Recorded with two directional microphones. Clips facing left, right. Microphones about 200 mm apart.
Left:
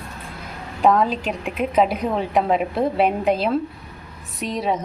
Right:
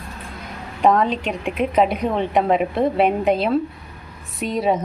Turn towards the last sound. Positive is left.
turn(degrees=0)  # may be behind; listen again after turning